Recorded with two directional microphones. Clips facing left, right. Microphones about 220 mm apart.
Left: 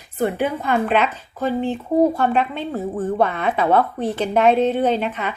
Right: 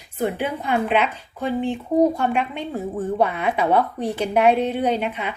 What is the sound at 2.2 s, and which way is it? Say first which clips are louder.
A woman's voice: left 3 dB; 15° right (ahead or behind).